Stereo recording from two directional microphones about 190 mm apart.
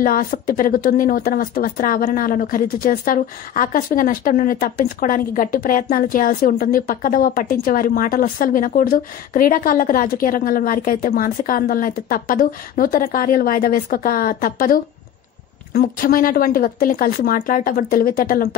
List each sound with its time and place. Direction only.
0.0 s speech: 50° left (ahead or behind)